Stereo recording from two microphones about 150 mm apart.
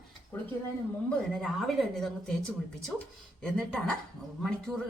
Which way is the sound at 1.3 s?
Centre (ahead or behind).